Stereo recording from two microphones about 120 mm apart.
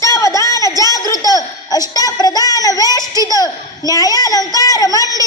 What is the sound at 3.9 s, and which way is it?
Child singing, 30° left (ahead or behind).